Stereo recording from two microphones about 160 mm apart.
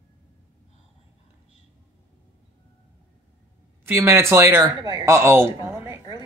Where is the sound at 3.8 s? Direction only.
15° right (ahead or behind).